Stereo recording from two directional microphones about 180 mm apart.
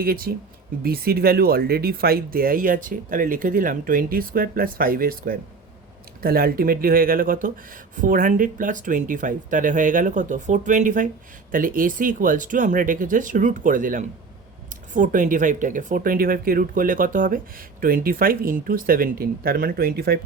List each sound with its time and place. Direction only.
0.0 s speech: 55° right (ahead or behind)